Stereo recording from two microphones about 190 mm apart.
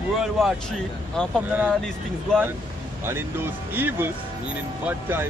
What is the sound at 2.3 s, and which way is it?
Speech, 5° left (ahead or behind).